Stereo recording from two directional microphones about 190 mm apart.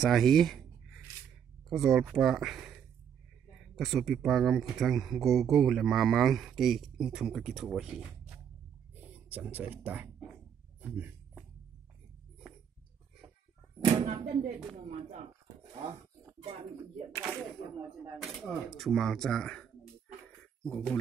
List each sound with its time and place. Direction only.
0.0 s speech: centre (ahead or behind)
1.7 s speech: centre (ahead or behind)
3.7 s speech: centre (ahead or behind)
10.8 s a sound: 10° right (ahead or behind)
13.8 s speech: 30° right (ahead or behind)
17.1 s speech: 5° left (ahead or behind)
17.7 s speech: 15° right (ahead or behind)
18.8 s speech: centre (ahead or behind)